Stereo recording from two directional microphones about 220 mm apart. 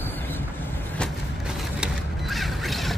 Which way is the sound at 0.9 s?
Centre (ahead or behind).